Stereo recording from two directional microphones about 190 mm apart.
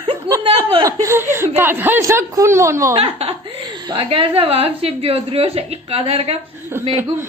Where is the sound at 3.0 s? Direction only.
30° right (ahead or behind).